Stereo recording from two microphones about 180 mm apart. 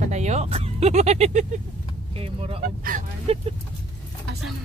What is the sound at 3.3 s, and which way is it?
Speech, 35° right (ahead or behind).